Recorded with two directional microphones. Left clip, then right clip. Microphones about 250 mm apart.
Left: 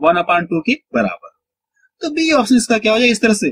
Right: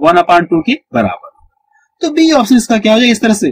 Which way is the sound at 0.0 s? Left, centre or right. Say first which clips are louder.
Right 6 dB; centre.